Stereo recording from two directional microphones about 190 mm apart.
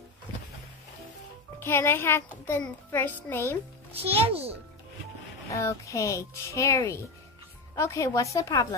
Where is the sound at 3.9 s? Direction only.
30° right (ahead or behind).